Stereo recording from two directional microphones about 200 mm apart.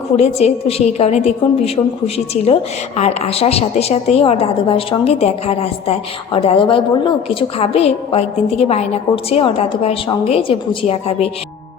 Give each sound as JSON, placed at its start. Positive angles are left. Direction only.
{"t": 0.2, "sound": "a woman's voice", "side_deg": 30}